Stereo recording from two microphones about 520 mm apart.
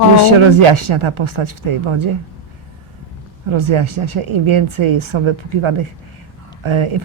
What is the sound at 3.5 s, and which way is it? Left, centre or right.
A woman's voice, right.